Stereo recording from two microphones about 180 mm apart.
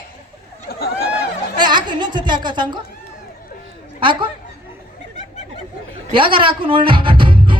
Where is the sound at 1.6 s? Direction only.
25° right (ahead or behind).